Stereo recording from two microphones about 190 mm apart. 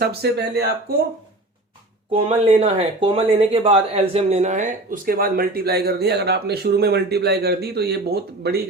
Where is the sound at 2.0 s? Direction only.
30° right (ahead or behind).